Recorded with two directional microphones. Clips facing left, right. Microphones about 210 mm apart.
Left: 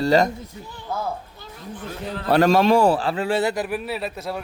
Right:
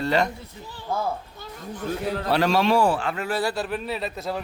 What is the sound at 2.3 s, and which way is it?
A man's voice, 45° left (ahead or behind).